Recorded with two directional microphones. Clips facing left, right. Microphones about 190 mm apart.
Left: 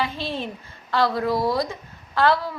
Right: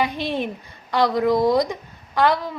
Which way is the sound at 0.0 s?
15° right (ahead or behind).